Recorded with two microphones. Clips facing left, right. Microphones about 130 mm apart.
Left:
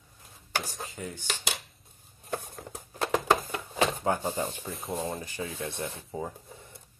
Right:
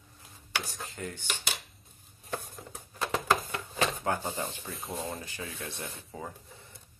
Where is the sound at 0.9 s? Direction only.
10° left (ahead or behind).